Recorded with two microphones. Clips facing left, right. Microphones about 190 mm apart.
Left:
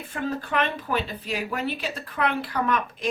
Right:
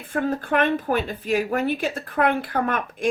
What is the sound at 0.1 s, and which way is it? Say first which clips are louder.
A woman's voice: right 5 dB; 50° right (ahead or behind).